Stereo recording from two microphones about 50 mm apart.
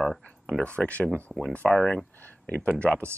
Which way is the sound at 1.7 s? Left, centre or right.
Centre.